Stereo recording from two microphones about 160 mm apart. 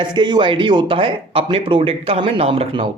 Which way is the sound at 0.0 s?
30° right (ahead or behind).